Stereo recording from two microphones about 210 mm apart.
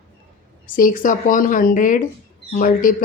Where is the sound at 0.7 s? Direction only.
40° left (ahead or behind).